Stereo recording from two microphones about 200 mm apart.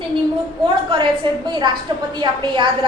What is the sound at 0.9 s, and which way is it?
A woman's voice, 20° right (ahead or behind).